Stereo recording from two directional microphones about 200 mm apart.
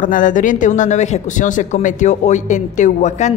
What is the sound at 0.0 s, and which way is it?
Speech, 40° left (ahead or behind).